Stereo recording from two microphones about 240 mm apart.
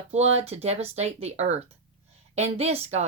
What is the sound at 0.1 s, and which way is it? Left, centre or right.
A woman's voice, right.